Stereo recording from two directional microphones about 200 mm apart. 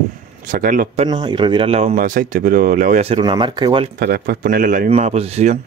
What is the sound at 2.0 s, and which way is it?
Speech, 45° right (ahead or behind).